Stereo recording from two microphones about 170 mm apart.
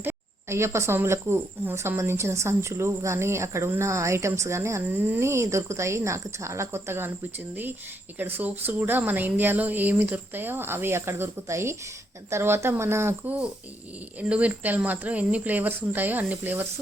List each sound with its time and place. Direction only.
0.0 s speech: 15° right (ahead or behind)
8.2 s speech: 10° right (ahead or behind)